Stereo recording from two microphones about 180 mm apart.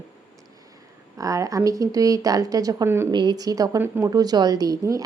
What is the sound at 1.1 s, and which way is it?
A woman's voice, 20° right (ahead or behind).